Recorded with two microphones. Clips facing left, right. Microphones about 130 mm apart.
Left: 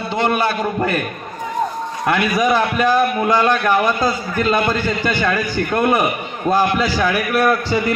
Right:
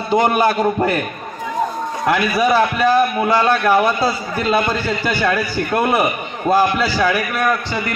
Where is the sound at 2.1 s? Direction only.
5° right (ahead or behind).